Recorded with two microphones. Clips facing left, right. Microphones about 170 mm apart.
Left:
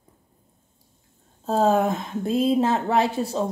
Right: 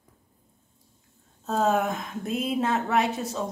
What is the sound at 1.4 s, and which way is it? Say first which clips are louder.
A woman's voice: left 4 dB; 35° left (ahead or behind).